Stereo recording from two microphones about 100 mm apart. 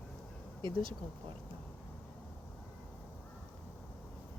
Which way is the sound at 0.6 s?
60° right (ahead or behind).